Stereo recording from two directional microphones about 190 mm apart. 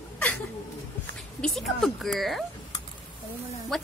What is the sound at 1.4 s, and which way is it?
A woman's voice, centre (ahead or behind).